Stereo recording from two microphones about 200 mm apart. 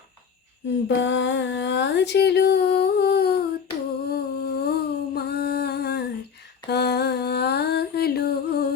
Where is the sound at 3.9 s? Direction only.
50° left (ahead or behind).